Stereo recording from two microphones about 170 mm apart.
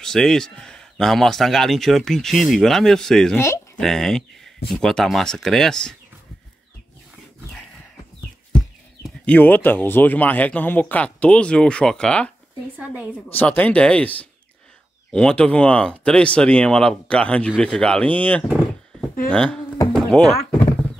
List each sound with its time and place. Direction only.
0.0 s a man's voice: 5° left (ahead or behind)
3.3 s speech: 15° left (ahead or behind)
3.8 s a man's voice: centre (ahead or behind)
8.5 s speech: 5° left (ahead or behind)
12.7 s a woman's voice: 10° right (ahead or behind)
13.3 s speech: 10° left (ahead or behind)
18.5 s a sound: centre (ahead or behind)
19.3 s a man's voice: 5° left (ahead or behind)
19.9 s a sound: 5° left (ahead or behind)